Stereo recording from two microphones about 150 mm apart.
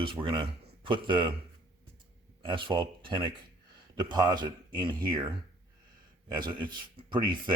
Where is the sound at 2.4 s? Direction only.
30° right (ahead or behind).